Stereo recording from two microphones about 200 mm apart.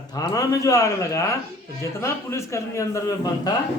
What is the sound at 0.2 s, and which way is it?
Speech, 15° left (ahead or behind).